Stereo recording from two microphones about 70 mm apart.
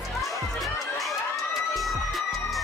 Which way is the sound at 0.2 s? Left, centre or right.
Centre.